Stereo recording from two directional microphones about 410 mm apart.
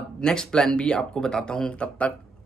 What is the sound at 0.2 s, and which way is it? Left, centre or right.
Speech, centre.